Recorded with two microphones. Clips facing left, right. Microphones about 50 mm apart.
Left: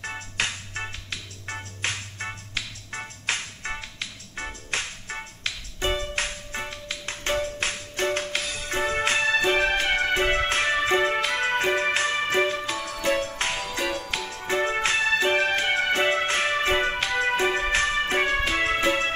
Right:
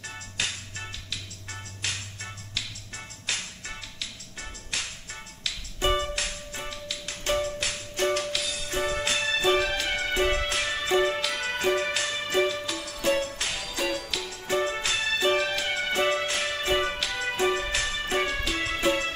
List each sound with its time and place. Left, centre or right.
0.0 s music: left